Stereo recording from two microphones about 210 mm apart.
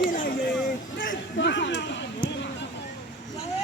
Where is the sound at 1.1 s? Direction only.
55° left (ahead or behind).